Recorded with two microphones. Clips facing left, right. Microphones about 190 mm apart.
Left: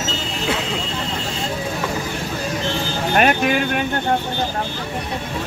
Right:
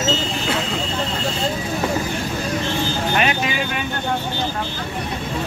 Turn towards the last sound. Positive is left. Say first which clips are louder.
# left 4 dB
turn(degrees=55)  # may be behind; listen again after turning